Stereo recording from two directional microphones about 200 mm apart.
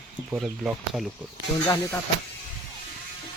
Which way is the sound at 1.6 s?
15° left (ahead or behind).